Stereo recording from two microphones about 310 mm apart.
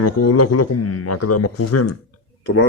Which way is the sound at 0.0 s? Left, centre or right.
Left.